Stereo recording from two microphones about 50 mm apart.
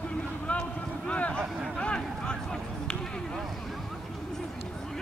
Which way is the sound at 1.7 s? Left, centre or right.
Centre.